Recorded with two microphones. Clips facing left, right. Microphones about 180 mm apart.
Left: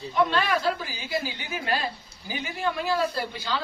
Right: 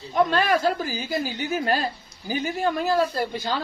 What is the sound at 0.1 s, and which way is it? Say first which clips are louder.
Speech: right 3 dB; 45° right (ahead or behind).